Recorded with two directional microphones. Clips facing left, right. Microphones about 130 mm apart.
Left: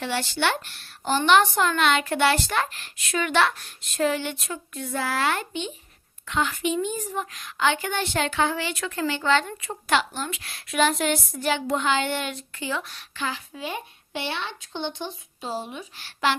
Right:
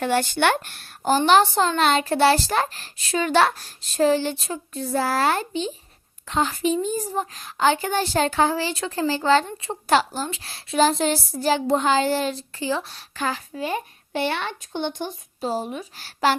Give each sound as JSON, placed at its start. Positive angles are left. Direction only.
{"t": 0.0, "sound": "a woman's voice", "side_deg": -50}